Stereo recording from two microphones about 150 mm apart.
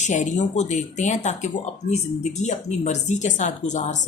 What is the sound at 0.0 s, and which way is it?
Speech, 50° left (ahead or behind).